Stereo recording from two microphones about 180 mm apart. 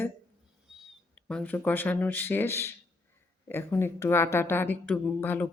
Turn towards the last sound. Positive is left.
turn(degrees=10)  # may be behind; listen again after turning